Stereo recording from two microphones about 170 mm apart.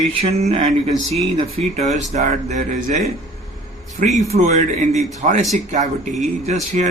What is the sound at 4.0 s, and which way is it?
Speech, 50° right (ahead or behind).